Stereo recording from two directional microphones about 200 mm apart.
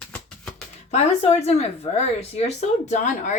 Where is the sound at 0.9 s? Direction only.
35° left (ahead or behind).